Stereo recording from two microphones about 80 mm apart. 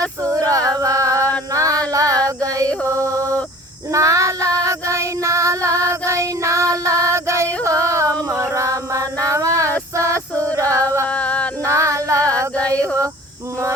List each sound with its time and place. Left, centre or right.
0.2 s female singing: right
1.5 s a sound: right
1.9 s female singing: right
2.8 s music: right
3.9 s child singing: right
8.3 s a sound: right
9.9 s music: right
11.1 s male singing: centre
11.6 s female singing: right
12.7 s a sound: centre